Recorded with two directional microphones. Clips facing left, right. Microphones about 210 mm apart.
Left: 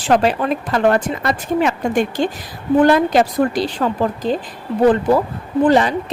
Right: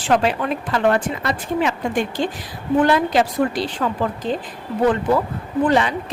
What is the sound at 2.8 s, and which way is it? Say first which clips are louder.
A woman's voice: left 4 dB; 45° left (ahead or behind).